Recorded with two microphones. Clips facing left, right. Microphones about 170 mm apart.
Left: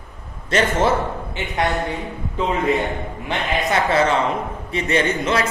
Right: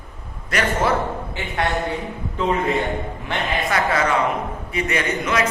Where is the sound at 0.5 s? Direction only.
25° left (ahead or behind).